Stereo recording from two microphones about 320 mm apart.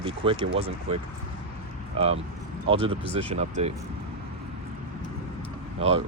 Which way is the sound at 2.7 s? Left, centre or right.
Centre.